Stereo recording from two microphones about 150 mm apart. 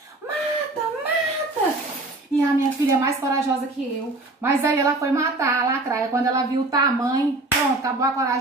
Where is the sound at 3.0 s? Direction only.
20° right (ahead or behind).